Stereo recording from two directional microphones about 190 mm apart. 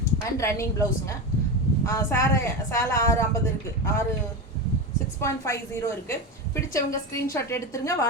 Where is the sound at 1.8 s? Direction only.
15° left (ahead or behind).